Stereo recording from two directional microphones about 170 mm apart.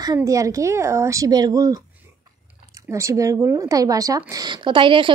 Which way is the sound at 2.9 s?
15° right (ahead or behind).